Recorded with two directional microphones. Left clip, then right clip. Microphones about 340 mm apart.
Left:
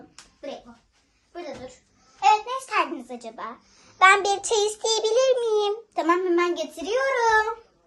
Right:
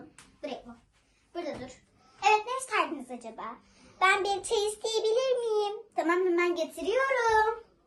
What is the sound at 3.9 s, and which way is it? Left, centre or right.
Child singing, left.